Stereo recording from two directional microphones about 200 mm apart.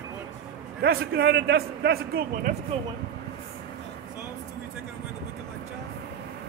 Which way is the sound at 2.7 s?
30° right (ahead or behind).